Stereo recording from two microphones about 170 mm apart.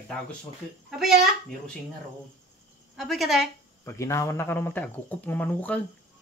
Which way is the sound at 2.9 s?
Centre (ahead or behind).